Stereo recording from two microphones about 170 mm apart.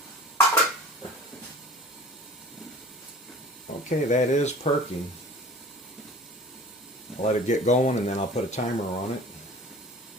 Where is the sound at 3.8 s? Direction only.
45° left (ahead or behind).